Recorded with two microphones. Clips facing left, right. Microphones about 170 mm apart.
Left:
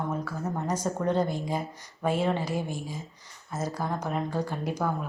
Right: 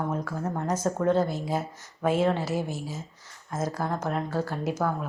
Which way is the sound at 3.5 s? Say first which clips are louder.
Right 2 dB; 10° left (ahead or behind).